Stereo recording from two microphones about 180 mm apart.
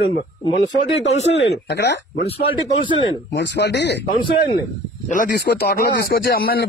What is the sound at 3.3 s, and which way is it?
Speech, 70° left (ahead or behind).